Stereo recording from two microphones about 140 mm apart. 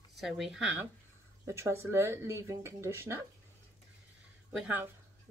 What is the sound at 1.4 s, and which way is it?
Speech, 20° right (ahead or behind).